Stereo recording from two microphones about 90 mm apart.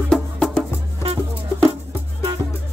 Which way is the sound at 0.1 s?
5° left (ahead or behind).